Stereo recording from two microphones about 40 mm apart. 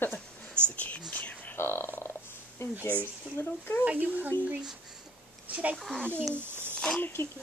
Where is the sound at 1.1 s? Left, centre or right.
Left.